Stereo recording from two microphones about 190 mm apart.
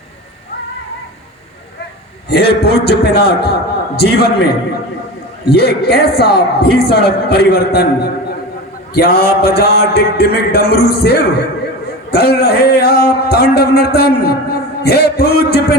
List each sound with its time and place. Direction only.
2.3 s speech: 55° left (ahead or behind)